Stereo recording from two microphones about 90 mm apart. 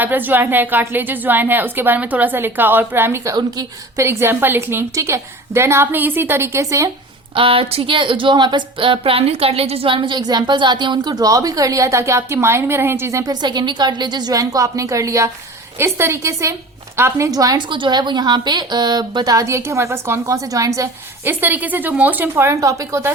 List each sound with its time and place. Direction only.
0.0 s a woman's voice: 20° right (ahead or behind)
3.3 s a woman's voice: 45° right (ahead or behind)
4.0 s a woman's voice: 30° right (ahead or behind)
7.3 s a woman's voice: 90° right; by 13.3 s 35° right (ahead or behind)
13.4 s a woman's voice: 55° right (ahead or behind); by 17.3 s 30° right (ahead or behind)
17.3 s a woman's voice: 45° right (ahead or behind)
17.6 s a woman's voice: 60° right (ahead or behind); by 20.9 s 35° right (ahead or behind)
21.2 s a woman's voice: 20° right (ahead or behind)